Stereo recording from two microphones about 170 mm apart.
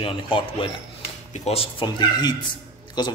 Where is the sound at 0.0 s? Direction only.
30° left (ahead or behind).